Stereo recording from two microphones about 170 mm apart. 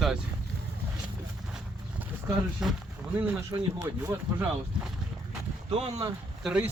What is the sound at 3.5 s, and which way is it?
Speech, 20° right (ahead or behind).